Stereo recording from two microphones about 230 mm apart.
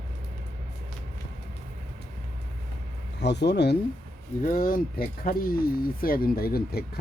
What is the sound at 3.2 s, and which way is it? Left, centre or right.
Speech, left.